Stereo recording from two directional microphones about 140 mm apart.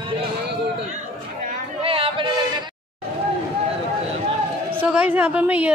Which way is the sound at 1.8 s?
40° right (ahead or behind).